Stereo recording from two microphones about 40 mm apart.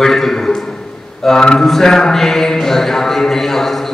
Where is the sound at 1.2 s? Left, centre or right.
Centre.